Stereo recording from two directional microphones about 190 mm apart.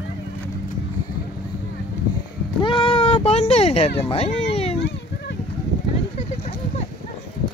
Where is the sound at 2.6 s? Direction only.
25° left (ahead or behind).